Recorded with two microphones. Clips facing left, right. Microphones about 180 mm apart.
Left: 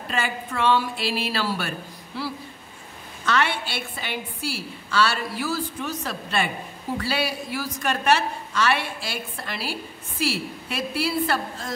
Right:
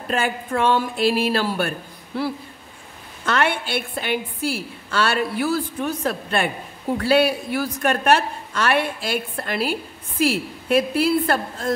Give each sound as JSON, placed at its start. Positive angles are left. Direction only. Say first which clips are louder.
{"t": 0.1, "sound": "a woman's voice", "louder": "right 6 dB", "side_deg": -50}